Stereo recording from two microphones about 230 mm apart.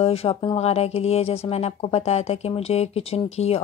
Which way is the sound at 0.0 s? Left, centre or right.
Left.